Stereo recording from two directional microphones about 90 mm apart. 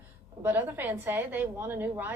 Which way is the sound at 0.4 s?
20° right (ahead or behind).